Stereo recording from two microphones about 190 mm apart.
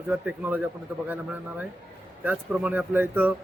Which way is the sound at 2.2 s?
10° right (ahead or behind).